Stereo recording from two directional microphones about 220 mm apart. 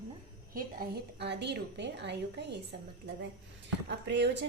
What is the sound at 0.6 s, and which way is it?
A woman's voice, 45° right (ahead or behind).